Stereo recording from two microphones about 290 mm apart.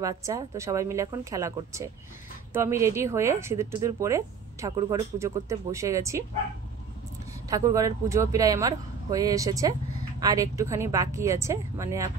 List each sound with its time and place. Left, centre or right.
0.0 s speech: centre
7.4 s speech: centre